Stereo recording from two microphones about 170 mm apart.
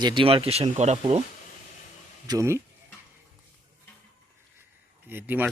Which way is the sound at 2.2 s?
20° right (ahead or behind).